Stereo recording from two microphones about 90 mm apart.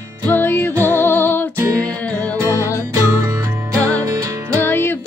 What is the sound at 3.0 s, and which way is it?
Music, 40° right (ahead or behind).